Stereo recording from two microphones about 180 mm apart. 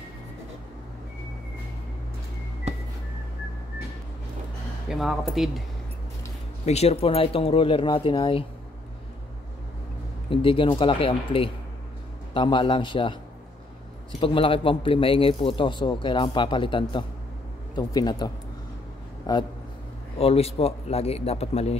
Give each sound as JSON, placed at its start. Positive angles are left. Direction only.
{"t": 4.8, "sound": "speech", "side_deg": 0}
{"t": 6.6, "sound": "speech", "side_deg": 35}
{"t": 10.3, "sound": "a man's voice", "side_deg": 30}
{"t": 14.2, "sound": "a man's voice", "side_deg": 30}
{"t": 20.2, "sound": "speech", "side_deg": 35}